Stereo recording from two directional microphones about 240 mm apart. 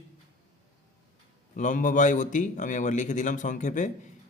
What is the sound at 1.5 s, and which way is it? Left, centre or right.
A man's voice, left.